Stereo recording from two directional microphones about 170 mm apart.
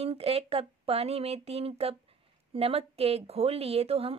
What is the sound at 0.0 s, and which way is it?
A woman's voice, 35° right (ahead or behind).